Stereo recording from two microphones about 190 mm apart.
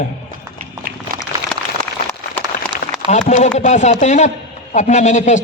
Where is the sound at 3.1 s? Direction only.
35° left (ahead or behind).